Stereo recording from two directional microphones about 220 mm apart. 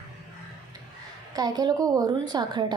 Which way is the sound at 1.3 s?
15° right (ahead or behind).